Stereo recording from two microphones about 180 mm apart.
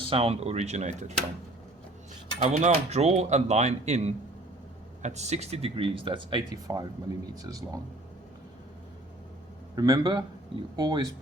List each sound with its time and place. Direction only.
0.1 s speech: 30° right (ahead or behind)
2.4 s speech: 40° right (ahead or behind); by 6.8 s 20° right (ahead or behind)
9.7 s speech: 20° right (ahead or behind)